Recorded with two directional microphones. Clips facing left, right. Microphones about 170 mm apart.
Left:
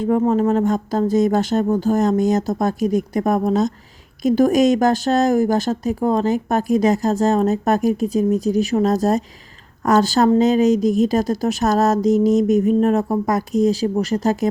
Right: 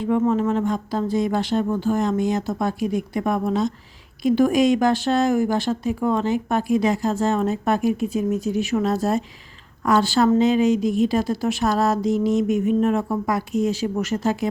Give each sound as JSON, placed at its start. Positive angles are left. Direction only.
{"t": 0.0, "sound": "speech", "side_deg": 40}